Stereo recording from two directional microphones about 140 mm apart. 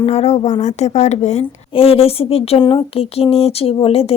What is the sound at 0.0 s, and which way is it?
A woman's voice, 50° left (ahead or behind).